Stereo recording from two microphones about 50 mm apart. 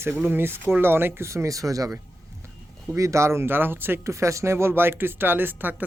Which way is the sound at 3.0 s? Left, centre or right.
Right.